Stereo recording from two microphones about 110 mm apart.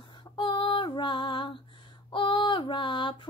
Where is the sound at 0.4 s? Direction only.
45° left (ahead or behind).